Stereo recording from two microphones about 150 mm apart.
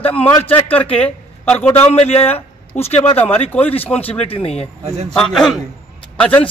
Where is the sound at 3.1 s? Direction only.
10° left (ahead or behind).